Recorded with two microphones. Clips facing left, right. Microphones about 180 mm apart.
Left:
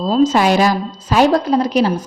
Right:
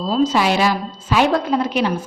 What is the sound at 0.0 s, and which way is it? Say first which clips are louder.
Speech: left 4 dB; 45° left (ahead or behind).